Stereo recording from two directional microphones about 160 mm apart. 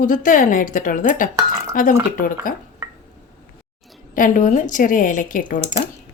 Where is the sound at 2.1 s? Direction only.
60° left (ahead or behind).